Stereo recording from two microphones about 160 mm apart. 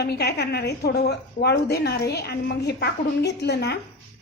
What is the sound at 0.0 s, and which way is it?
A woman's voice, 90° left.